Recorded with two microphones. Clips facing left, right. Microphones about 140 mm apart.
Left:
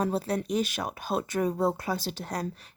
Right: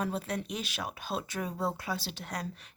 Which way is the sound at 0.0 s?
35° left (ahead or behind).